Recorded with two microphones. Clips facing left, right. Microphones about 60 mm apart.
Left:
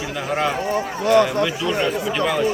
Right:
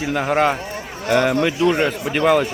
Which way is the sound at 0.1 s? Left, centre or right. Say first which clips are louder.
Right 5 dB; right.